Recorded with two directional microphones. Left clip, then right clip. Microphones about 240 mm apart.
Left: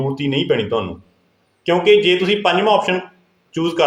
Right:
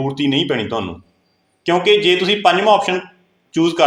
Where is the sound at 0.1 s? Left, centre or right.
Centre.